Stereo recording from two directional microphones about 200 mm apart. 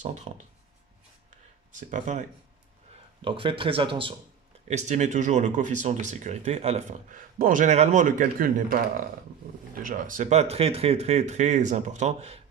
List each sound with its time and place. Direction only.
1.9 s speech: 40° right (ahead or behind)
3.2 s speech: 25° right (ahead or behind); by 8.8 s 45° right (ahead or behind)
9.8 s speech: 40° right (ahead or behind)